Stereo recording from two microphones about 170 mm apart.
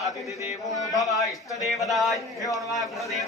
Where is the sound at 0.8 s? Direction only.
20° left (ahead or behind).